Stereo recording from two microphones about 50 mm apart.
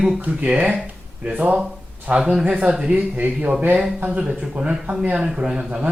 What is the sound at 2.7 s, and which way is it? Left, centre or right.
Speech, centre.